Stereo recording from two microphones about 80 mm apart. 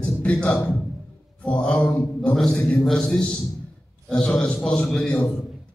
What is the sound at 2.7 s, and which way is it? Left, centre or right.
A man's voice, centre.